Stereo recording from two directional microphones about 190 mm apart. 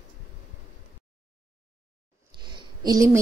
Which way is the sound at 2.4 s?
25° right (ahead or behind).